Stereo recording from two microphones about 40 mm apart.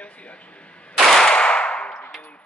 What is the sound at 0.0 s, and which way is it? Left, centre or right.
Arrow, left.